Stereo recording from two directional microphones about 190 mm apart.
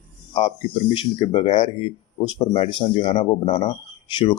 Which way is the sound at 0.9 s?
30° left (ahead or behind).